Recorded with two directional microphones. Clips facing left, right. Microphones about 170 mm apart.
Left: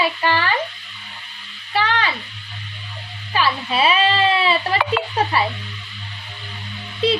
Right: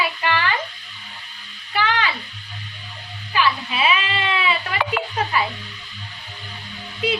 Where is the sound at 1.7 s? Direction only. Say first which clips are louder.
Left 1 dB; 30° left (ahead or behind).